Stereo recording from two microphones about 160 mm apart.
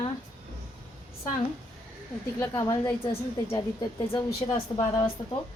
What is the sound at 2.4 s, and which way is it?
Speech, 20° left (ahead or behind).